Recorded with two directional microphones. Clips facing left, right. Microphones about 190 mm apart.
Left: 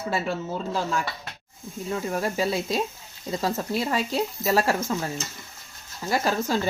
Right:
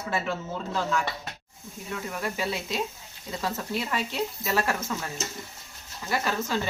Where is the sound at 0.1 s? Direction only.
35° left (ahead or behind).